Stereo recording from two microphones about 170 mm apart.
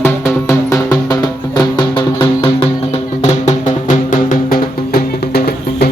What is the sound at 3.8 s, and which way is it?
Music, 55° left (ahead or behind).